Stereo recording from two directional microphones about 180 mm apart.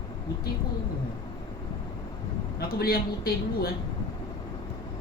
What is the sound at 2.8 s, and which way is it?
Speech, 55° left (ahead or behind).